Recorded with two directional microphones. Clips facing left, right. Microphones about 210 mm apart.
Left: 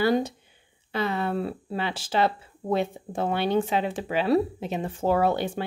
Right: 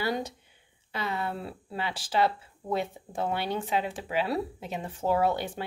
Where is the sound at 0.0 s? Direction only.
30° left (ahead or behind).